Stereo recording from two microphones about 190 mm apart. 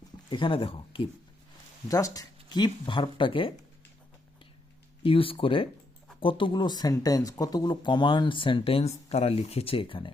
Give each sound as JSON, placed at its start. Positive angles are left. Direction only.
{"t": 0.3, "sound": "speech", "side_deg": 25}
{"t": 1.9, "sound": "speech", "side_deg": 15}
{"t": 5.0, "sound": "speech", "side_deg": 30}